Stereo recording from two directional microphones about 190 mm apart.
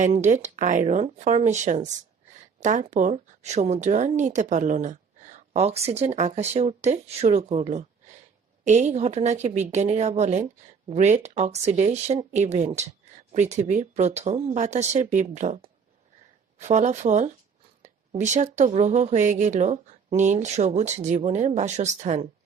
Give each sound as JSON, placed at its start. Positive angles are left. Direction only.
{"t": 0.0, "sound": "speech", "side_deg": -40}